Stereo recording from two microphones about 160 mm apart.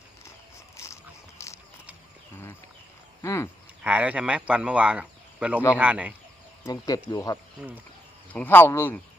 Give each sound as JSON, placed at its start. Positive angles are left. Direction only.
{"t": 1.4, "sound": "a sound", "side_deg": 20}
{"t": 3.2, "sound": "speech", "side_deg": 20}
{"t": 3.8, "sound": "speech", "side_deg": -10}
{"t": 6.7, "sound": "speech", "side_deg": 20}
{"t": 8.3, "sound": "speech", "side_deg": 10}